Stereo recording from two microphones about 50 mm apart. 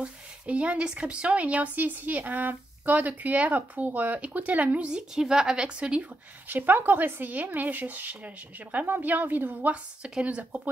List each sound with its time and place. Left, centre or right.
0.0 s speech: right
5.1 s speech: centre
6.4 s speech: right
10.0 s speech: right